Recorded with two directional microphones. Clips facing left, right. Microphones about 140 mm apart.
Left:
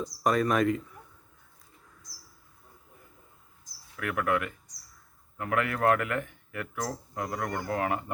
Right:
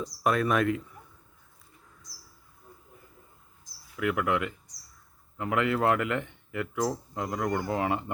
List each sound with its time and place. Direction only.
0.0 s speech: centre (ahead or behind)
3.9 s speech: 15° right (ahead or behind)